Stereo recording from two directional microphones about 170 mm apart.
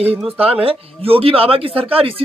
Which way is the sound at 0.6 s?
35° right (ahead or behind).